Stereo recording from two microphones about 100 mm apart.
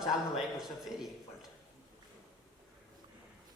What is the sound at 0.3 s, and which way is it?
A woman's voice, 5° right (ahead or behind).